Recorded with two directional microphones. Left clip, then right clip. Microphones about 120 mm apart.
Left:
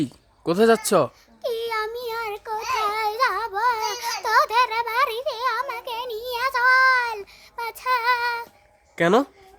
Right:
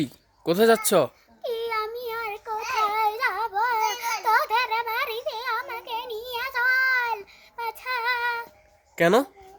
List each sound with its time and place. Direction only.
0.0 s speech: 25° left (ahead or behind)
1.5 s child singing: 35° left (ahead or behind)
9.0 s speech: 30° left (ahead or behind)